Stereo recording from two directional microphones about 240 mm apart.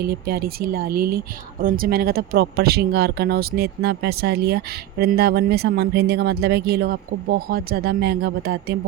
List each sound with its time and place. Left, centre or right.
0.0 s speech: right